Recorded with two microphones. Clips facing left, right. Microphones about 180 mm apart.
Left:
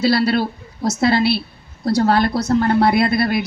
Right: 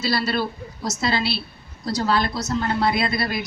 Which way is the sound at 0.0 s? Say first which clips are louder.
Left 7 dB; 55° left (ahead or behind).